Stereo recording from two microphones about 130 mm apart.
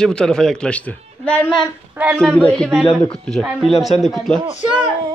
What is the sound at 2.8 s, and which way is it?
Speech, 40° left (ahead or behind).